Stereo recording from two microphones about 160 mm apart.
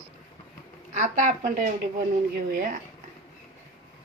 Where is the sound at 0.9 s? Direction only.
50° right (ahead or behind).